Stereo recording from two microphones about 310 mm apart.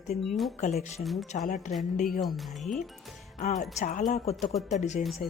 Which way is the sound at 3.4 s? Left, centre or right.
Left.